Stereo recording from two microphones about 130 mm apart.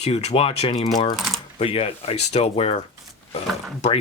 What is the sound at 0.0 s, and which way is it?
Speech, 55° left (ahead or behind).